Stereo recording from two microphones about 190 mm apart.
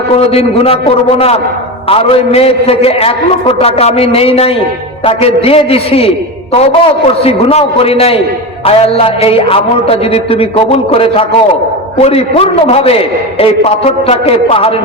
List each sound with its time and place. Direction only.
0.3 s a man's voice: 30° left (ahead or behind)